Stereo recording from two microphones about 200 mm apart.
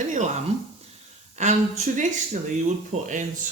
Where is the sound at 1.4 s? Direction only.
35° right (ahead or behind).